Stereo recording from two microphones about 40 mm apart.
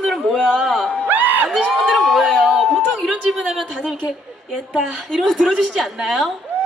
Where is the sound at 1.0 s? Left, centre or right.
Right.